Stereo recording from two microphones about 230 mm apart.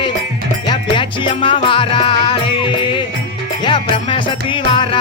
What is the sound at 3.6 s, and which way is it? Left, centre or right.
Music, left.